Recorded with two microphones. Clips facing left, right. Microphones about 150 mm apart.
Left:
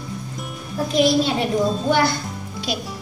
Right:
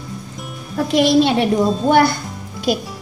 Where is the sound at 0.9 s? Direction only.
80° right.